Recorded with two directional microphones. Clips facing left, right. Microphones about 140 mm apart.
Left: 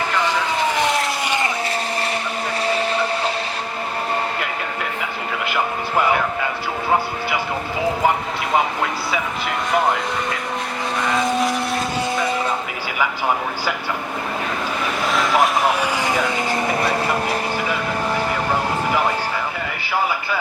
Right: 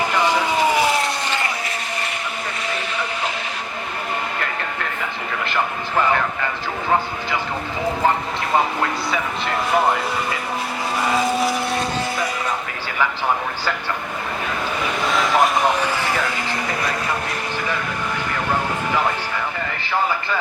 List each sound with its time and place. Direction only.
0.1 s vehicle: 10° right (ahead or behind)
1.2 s vehicle: 15° left (ahead or behind)
2.7 s vehicle: 35° left (ahead or behind)
6.1 s speech: 10° left (ahead or behind)
8.5 s speech: 5° left (ahead or behind)
11.0 s vehicle: 5° right (ahead or behind)
13.0 s speech: 10° left (ahead or behind)
15.0 s vehicle: centre (ahead or behind)